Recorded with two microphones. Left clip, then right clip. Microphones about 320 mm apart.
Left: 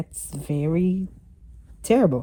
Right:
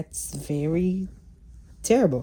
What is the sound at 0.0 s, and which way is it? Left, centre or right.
Speech, centre.